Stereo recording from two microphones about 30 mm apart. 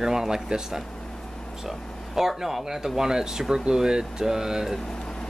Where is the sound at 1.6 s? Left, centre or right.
Centre.